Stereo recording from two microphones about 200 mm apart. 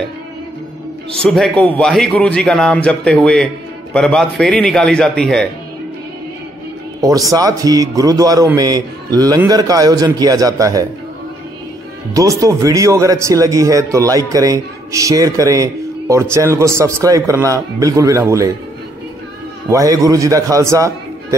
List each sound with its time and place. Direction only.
1.2 s a man's voice: centre (ahead or behind)
7.0 s a man's voice: 15° right (ahead or behind)
12.1 s speech: 15° right (ahead or behind)
19.7 s speech: 15° right (ahead or behind)